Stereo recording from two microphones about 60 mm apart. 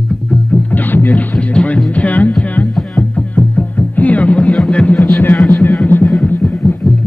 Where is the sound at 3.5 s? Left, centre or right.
Left.